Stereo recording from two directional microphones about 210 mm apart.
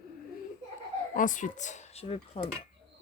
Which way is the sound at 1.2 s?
35° left (ahead or behind).